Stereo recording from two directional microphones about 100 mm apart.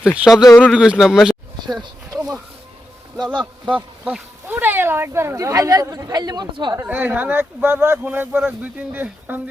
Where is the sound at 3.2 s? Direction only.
15° right (ahead or behind); by 6.7 s 45° right (ahead or behind).